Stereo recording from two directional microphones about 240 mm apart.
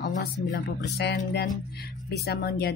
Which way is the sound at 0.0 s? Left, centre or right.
Left.